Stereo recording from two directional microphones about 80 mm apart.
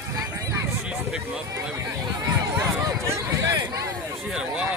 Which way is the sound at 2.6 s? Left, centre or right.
Right.